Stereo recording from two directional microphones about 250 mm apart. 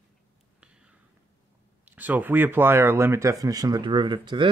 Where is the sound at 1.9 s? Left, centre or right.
Centre.